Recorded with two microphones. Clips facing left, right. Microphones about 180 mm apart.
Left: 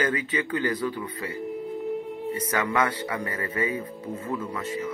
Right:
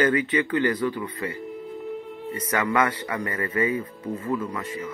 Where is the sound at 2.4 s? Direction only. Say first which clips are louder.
Right 3 dB; 10° left (ahead or behind).